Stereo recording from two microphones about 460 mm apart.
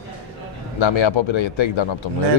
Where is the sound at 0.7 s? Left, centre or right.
Left.